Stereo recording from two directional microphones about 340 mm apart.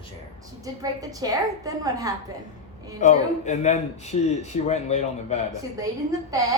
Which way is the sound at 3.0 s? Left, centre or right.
Left.